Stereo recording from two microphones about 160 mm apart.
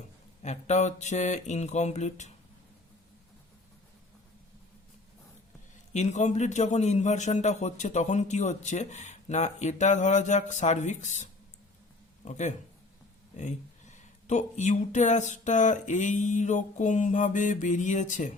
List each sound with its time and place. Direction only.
0.4 s a man's voice: 45° left (ahead or behind)
5.9 s a man's voice: 45° left (ahead or behind)